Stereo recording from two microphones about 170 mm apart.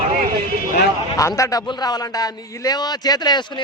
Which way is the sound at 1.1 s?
20° left (ahead or behind).